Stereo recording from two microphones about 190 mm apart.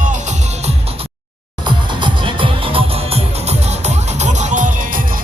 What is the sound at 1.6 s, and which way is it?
Music, 25° right (ahead or behind).